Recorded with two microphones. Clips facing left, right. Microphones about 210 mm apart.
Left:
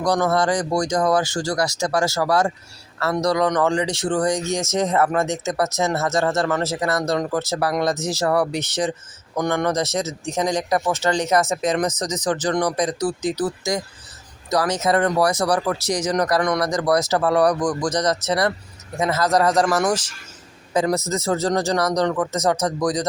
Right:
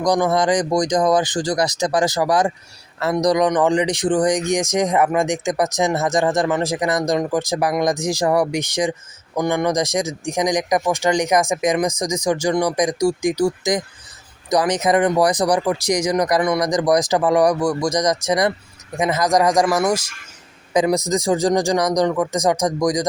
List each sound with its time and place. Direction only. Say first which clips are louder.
0.0 s speech: right 2 dB; 15° right (ahead or behind)